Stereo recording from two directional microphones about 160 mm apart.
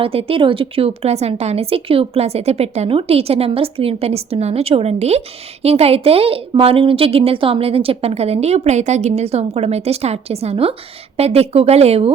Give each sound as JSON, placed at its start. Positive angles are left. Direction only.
{"t": 0.0, "sound": "a woman's voice", "side_deg": -35}